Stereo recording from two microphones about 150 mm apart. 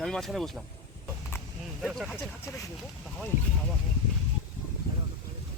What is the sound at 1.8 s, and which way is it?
Speech, centre (ahead or behind).